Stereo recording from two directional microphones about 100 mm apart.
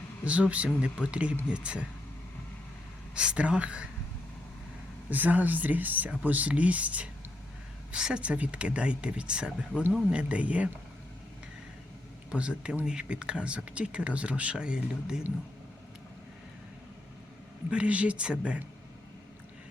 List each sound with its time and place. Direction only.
0.3 s speech: 10° right (ahead or behind)
3.2 s speech: 10° right (ahead or behind)
5.1 s speech: 15° right (ahead or behind)
12.3 s speech: 10° right (ahead or behind)
17.7 s speech: 10° right (ahead or behind)